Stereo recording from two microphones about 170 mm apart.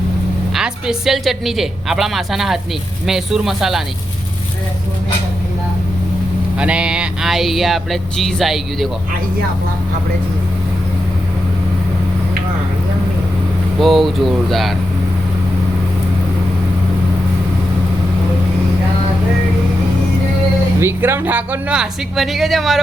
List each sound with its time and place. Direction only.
0.5 s speech: 5° right (ahead or behind)
6.6 s speech: 5° right (ahead or behind)
13.7 s speech: centre (ahead or behind)
20.7 s speech: 15° right (ahead or behind)